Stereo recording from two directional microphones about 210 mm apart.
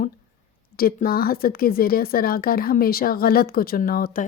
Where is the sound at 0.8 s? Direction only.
45° left (ahead or behind).